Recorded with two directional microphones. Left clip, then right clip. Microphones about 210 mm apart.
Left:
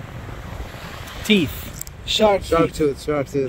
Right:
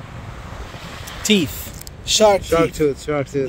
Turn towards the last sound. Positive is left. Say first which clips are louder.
# even
turn(degrees=30)  # may be behind; listen again after turning